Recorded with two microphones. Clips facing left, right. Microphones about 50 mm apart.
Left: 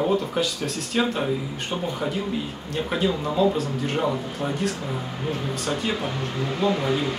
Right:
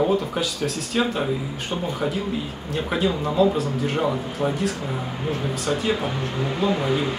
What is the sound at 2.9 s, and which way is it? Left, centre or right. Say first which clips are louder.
Speech: right 2 dB; centre.